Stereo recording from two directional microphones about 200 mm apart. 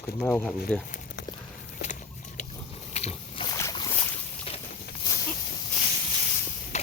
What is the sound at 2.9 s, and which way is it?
Boat, 30° left (ahead or behind).